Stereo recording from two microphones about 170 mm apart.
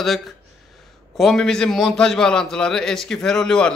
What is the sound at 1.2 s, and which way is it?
A man's voice, 5° left (ahead or behind).